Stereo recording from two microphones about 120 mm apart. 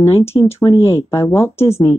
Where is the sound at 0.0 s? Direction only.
60° left (ahead or behind).